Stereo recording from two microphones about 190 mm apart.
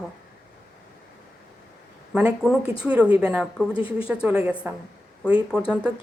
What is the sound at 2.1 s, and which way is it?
A woman's voice, 5° right (ahead or behind).